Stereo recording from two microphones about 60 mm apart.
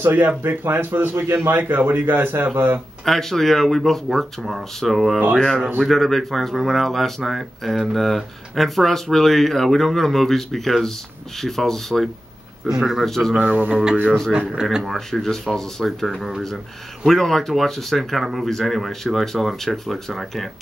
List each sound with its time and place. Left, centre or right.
0.0 s speech: right
1.6 s speech: right
3.1 s speech: centre
6.8 s speech: centre
12.6 s a man's voice: centre
13.0 s speech: centre
13.4 s mantra: right
14.5 s a man's voice: centre
14.9 s speech: centre